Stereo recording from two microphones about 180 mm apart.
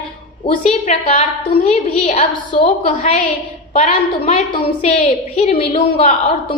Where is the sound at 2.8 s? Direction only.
45° left (ahead or behind).